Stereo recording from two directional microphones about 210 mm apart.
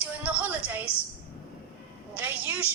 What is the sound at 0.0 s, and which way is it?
Music, 5° right (ahead or behind).